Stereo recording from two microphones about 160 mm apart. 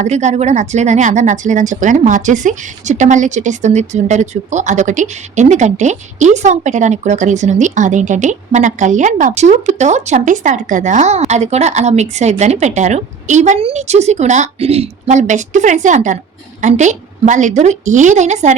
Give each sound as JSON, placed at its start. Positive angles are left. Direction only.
{"t": 0.0, "sound": "speech", "side_deg": -45}